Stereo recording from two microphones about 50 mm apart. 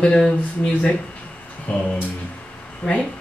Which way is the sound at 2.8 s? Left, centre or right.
Left.